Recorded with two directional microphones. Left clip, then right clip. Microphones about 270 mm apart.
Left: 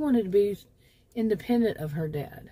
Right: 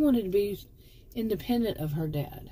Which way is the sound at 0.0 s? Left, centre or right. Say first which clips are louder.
Left 2 dB; left.